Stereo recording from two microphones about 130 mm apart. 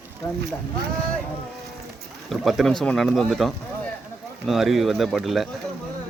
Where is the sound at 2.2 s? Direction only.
Centre (ahead or behind).